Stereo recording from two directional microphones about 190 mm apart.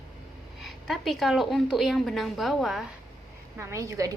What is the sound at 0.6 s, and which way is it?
A woman's voice, centre (ahead or behind).